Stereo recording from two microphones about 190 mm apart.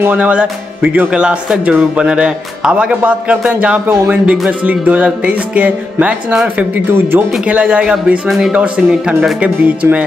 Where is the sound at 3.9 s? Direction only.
15° right (ahead or behind).